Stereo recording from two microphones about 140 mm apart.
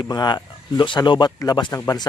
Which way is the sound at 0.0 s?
30° left (ahead or behind).